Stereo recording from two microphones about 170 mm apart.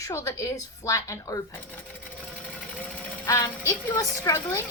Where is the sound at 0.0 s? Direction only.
20° left (ahead or behind).